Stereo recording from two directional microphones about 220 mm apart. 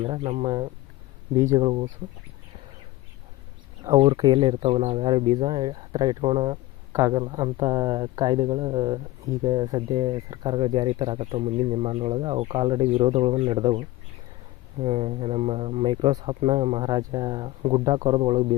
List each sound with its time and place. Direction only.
0.0 s speech: 25° right (ahead or behind)
3.8 s speech: 20° right (ahead or behind)